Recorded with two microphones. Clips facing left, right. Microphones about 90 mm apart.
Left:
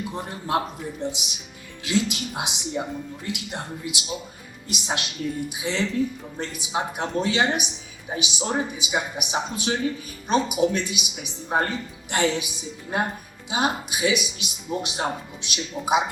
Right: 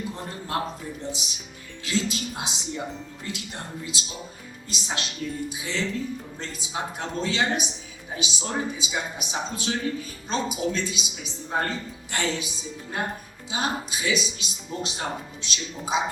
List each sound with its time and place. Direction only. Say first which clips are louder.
0.0 s speech: left 2 dB; 15° left (ahead or behind)